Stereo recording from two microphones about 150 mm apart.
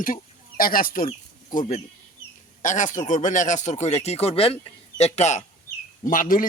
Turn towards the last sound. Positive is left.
turn(degrees=65)  # may be behind; listen again after turning